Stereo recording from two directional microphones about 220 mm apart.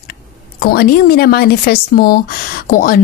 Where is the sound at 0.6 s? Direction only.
45° left (ahead or behind).